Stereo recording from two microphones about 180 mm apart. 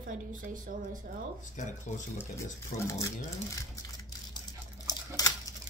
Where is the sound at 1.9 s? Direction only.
40° left (ahead or behind).